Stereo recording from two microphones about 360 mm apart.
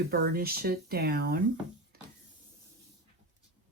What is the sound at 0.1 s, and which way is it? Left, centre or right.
Speech, right.